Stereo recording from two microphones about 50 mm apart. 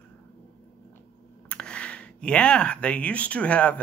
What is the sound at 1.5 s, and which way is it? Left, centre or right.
Speech, centre.